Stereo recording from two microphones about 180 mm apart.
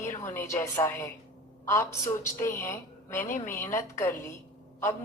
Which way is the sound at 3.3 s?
45° left (ahead or behind).